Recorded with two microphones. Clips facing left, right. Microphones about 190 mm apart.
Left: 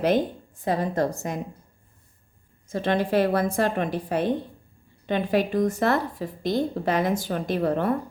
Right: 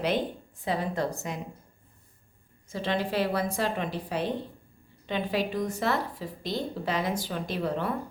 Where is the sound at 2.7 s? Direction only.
50° left (ahead or behind).